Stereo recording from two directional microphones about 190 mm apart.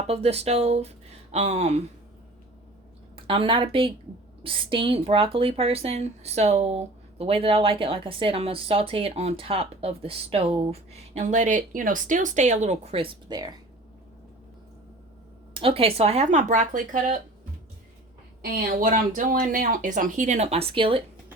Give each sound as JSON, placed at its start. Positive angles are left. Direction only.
{"t": 0.1, "sound": "speech", "side_deg": -35}
{"t": 3.2, "sound": "a woman's voice", "side_deg": -25}
{"t": 15.5, "sound": "speech", "side_deg": -30}
{"t": 18.4, "sound": "speech", "side_deg": -45}